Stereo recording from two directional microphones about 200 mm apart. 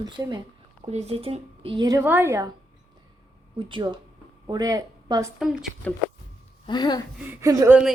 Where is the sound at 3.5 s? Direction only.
25° right (ahead or behind).